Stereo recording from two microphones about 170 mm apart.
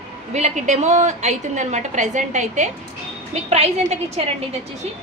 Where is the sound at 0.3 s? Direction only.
45° right (ahead or behind).